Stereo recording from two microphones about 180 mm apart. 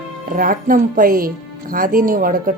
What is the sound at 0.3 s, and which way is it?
Speech, 50° right (ahead or behind).